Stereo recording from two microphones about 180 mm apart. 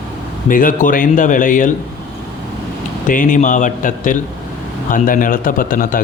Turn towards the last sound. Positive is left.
turn(degrees=50)  # may be behind; listen again after turning